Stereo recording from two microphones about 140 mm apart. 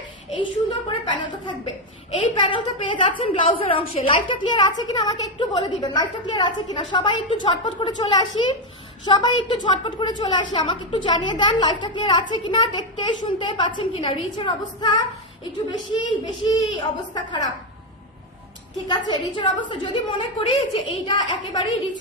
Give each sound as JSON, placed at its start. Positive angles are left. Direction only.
{"t": 1.0, "sound": "a woman's voice", "side_deg": 35}
{"t": 18.9, "sound": "a woman's voice", "side_deg": 30}